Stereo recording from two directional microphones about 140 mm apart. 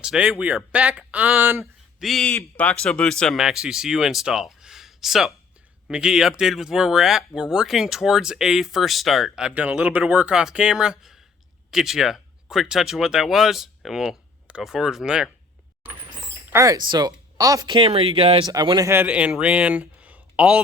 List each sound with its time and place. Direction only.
0.0 s speech: 5° right (ahead or behind)
2.0 s speech: centre (ahead or behind)
2.3 s speech: 15° left (ahead or behind); by 15.3 s 5° right (ahead or behind)
16.5 s speech: 20° right (ahead or behind)
16.7 s speech: 30° right (ahead or behind)
18.4 s speech: 30° right (ahead or behind)
18.9 s speech: 10° right (ahead or behind)